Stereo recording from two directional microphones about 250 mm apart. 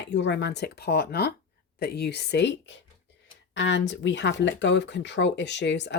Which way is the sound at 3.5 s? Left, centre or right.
Left.